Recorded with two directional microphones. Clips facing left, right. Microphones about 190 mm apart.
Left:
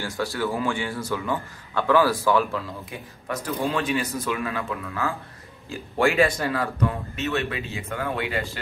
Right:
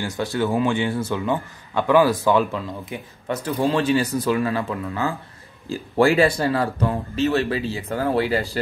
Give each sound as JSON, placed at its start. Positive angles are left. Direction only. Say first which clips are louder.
{"t": 0.0, "sound": "a man's voice", "louder": "right 3 dB", "side_deg": -20}